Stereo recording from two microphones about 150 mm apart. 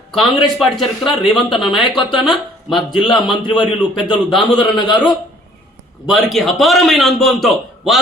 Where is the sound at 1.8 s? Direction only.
35° left (ahead or behind).